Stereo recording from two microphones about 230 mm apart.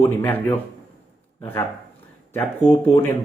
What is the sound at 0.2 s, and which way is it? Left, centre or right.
Speech, centre.